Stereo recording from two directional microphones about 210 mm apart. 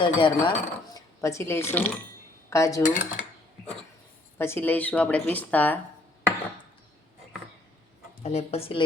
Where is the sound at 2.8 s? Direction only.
40° left (ahead or behind).